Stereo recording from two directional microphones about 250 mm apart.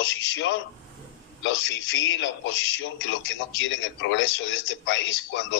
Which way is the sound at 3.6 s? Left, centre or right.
Left.